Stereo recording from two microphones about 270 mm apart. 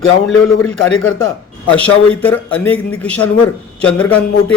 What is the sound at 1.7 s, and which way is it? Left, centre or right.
A man's voice, centre.